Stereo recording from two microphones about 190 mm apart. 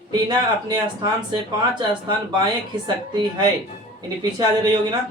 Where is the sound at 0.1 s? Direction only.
20° right (ahead or behind).